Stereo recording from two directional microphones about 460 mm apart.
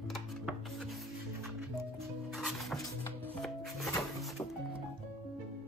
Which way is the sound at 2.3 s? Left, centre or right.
Centre.